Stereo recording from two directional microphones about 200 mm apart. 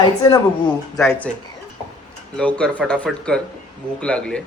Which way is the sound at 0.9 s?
10° left (ahead or behind).